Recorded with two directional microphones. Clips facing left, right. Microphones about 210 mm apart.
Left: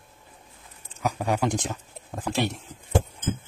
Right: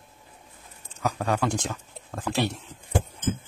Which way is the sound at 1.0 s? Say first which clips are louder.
Left 1 dB; 15° left (ahead or behind).